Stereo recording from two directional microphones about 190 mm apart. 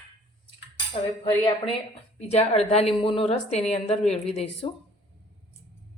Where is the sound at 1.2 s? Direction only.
30° left (ahead or behind).